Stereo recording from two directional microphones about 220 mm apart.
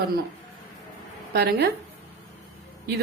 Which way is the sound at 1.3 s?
45° right (ahead or behind).